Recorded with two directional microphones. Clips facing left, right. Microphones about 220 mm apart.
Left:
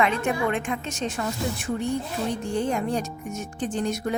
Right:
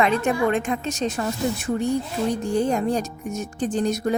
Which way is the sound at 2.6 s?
40° right (ahead or behind).